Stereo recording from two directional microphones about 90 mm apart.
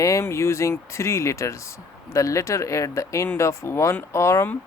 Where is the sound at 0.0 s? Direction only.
35° left (ahead or behind).